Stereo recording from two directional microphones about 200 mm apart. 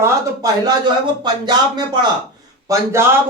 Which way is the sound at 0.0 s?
20° right (ahead or behind).